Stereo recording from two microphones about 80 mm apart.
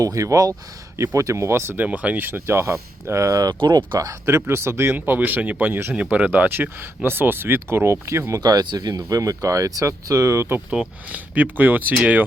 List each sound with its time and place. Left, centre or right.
0.0 s speech: right
3.6 s speech: right
3.9 s speech: right
8.4 s speech: right
10.7 s speech: centre